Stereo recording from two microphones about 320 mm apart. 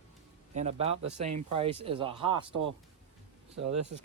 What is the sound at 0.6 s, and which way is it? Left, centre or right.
Speech, centre.